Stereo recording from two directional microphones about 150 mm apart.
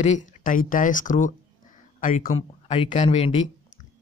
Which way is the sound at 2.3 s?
40° left (ahead or behind).